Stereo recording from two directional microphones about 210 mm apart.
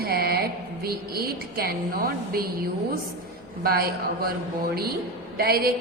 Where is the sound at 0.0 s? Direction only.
45° right (ahead or behind).